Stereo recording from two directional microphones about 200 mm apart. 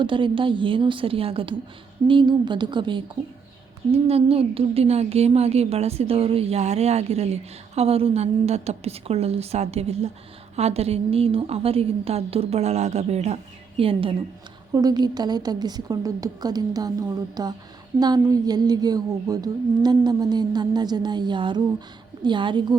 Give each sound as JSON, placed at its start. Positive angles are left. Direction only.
{"t": 0.0, "sound": "a woman's voice", "side_deg": -25}